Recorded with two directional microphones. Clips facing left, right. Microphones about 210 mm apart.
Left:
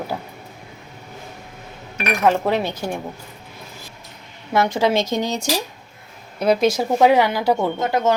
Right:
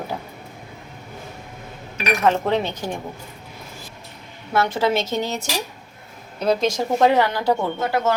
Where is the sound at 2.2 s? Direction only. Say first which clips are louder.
Left 2 dB; 10° left (ahead or behind).